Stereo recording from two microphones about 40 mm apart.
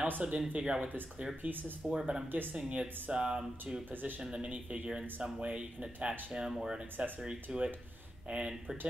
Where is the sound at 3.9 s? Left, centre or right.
Right.